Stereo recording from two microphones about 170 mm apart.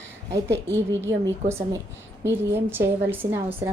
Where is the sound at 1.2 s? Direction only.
20° right (ahead or behind).